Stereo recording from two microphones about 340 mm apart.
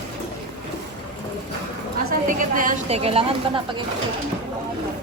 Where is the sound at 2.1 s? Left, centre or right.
Right.